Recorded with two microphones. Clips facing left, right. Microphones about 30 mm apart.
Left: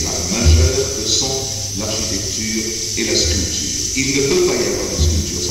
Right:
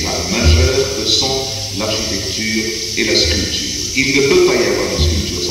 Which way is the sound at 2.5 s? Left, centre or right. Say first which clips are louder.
Right 4 dB; right.